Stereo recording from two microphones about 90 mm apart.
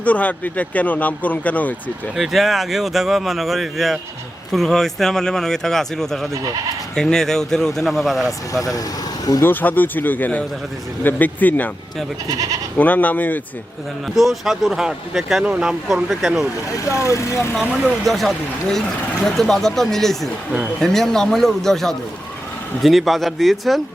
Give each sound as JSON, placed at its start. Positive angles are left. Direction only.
{"t": 0.0, "sound": "speech", "side_deg": 15}
{"t": 2.1, "sound": "speech", "side_deg": 0}
{"t": 8.3, "sound": "speech", "side_deg": 40}
{"t": 9.4, "sound": "a man's voice", "side_deg": 20}
{"t": 12.3, "sound": "speech", "side_deg": -40}
{"t": 12.7, "sound": "a man's voice", "side_deg": 20}
{"t": 14.2, "sound": "speech", "side_deg": 0}
{"t": 16.7, "sound": "speech", "side_deg": 35}
{"t": 17.6, "sound": "speech", "side_deg": 0}